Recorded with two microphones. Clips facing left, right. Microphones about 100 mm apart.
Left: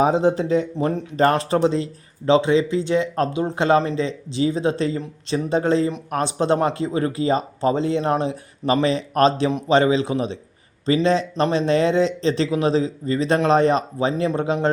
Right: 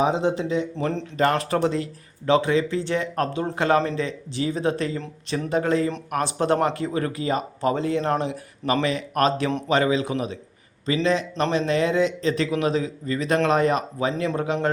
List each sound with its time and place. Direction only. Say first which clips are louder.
0.0 s speech: left 4 dB; 40° left (ahead or behind)
0.8 s speech: left 3 dB; 15° left (ahead or behind)
1.1 s speech: left 4 dB; 35° left (ahead or behind)
1.4 s speech: left 3 dB; 25° left (ahead or behind)